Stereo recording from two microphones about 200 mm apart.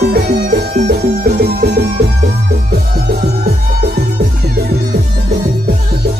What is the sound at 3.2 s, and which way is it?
Music, 50° right (ahead or behind).